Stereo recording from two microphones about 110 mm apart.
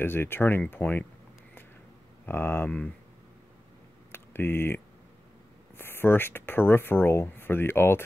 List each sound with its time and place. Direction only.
0.0 s speech: 20° left (ahead or behind)
2.2 s speech: 20° left (ahead or behind)
4.1 s a sound: 20° left (ahead or behind)
5.8 s speech: 20° left (ahead or behind)